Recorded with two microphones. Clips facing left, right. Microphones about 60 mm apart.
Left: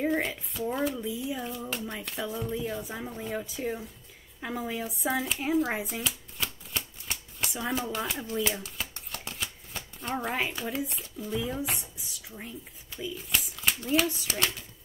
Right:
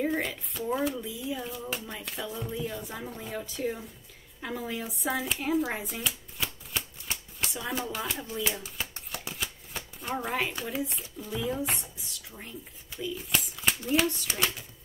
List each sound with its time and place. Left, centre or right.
0.0 s a woman's voice: centre
4.8 s a child's voice: centre